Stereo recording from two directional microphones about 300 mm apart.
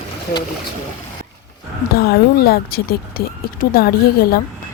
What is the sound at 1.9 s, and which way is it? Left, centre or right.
Speech, left.